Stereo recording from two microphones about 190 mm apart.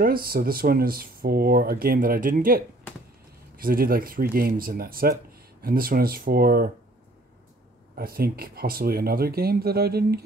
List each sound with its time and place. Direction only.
0.0 s speech: 50° right (ahead or behind)
7.9 s speech: 50° right (ahead or behind)